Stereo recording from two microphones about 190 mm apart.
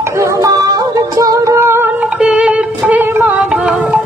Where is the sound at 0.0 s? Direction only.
15° right (ahead or behind).